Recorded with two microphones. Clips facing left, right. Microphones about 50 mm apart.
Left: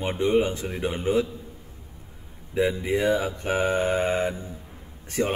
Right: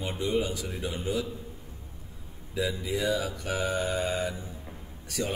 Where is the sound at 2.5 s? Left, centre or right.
Left.